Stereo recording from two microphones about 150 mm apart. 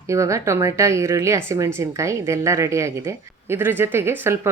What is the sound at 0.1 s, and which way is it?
A woman's voice, 20° right (ahead or behind).